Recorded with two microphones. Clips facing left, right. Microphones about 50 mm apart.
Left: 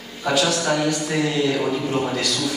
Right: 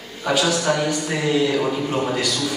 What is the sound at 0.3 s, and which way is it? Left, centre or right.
Speech, centre.